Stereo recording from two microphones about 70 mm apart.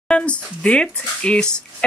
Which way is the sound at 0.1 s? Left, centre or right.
Centre.